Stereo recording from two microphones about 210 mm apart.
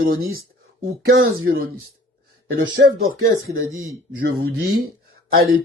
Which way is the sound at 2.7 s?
45° right (ahead or behind).